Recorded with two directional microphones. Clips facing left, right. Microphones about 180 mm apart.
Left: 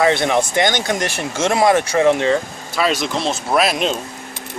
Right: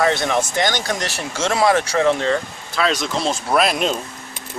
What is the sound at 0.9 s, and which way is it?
Speech, 55° left (ahead or behind).